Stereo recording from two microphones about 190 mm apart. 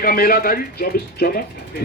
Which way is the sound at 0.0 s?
50° left (ahead or behind).